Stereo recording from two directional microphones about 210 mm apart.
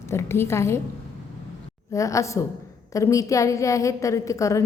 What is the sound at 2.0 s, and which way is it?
A woman's voice, 15° left (ahead or behind).